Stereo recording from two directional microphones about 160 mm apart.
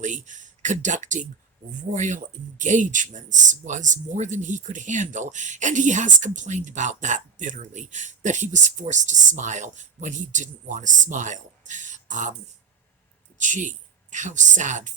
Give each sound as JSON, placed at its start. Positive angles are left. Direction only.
{"t": 0.0, "sound": "speech", "side_deg": -50}
{"t": 13.4, "sound": "speech", "side_deg": -50}